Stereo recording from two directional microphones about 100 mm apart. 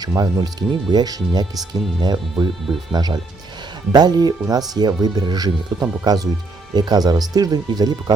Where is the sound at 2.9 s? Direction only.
45° right (ahead or behind).